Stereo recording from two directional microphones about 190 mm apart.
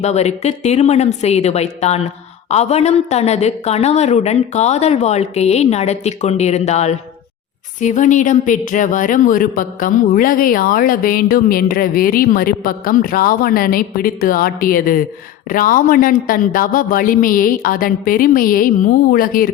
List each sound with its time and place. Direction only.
0.0 s a woman's voice: 35° left (ahead or behind)